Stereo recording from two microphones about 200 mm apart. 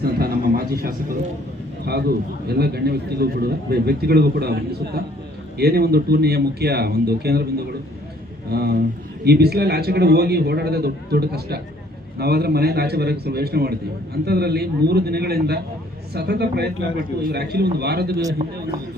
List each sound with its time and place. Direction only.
0.0 s a sound: 50° right (ahead or behind)
1.8 s a man's voice: 55° right (ahead or behind)
8.4 s a man's voice: 50° right (ahead or behind)
18.4 s speech: 35° right (ahead or behind)